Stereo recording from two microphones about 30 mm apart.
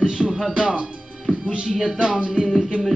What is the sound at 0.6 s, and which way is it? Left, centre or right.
Speech, right.